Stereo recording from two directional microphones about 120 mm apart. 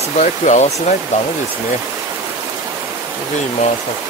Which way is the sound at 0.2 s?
90° left.